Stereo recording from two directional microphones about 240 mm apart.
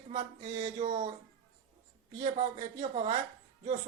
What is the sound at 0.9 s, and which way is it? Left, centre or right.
Speech, right.